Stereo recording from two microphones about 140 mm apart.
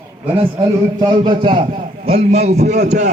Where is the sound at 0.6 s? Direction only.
30° right (ahead or behind).